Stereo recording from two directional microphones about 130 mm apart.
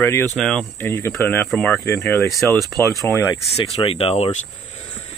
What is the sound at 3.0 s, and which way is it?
Speech, 15° left (ahead or behind).